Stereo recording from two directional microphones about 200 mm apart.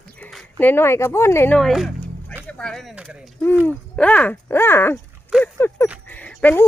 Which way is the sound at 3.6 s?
5° left (ahead or behind).